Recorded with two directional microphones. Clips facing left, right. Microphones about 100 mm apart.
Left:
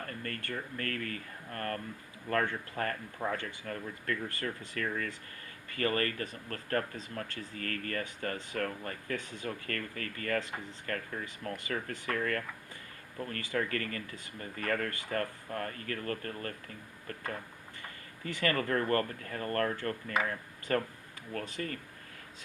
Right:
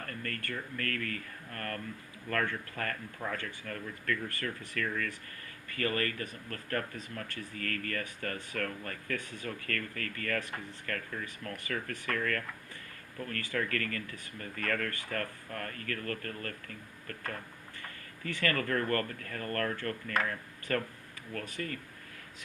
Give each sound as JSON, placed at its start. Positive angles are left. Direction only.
{"t": 0.0, "sound": "speech", "side_deg": 30}
{"t": 17.8, "sound": "speech", "side_deg": 20}